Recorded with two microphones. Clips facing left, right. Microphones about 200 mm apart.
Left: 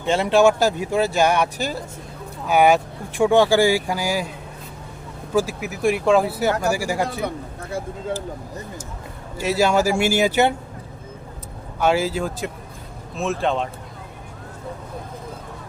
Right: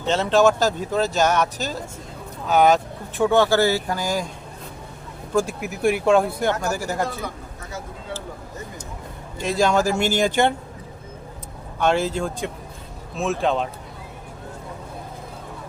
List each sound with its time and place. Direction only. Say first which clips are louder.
0.0 s speech: left 1 dB; 10° left (ahead or behind)
5.3 s speech: left 1 dB; 5° left (ahead or behind)
7.2 s a sound: left 5 dB; 65° left (ahead or behind)
9.4 s speech: left 1 dB; 5° left (ahead or behind)
11.8 s speech: left 1 dB; 5° left (ahead or behind)